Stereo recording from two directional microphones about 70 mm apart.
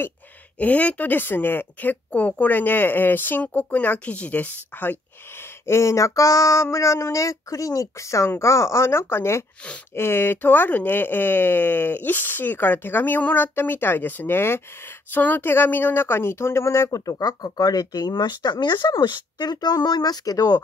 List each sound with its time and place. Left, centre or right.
0.6 s speech: left
5.7 s a sound: left
8.4 s speech: left